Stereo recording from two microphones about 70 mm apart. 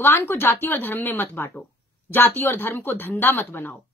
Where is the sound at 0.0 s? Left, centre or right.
Left.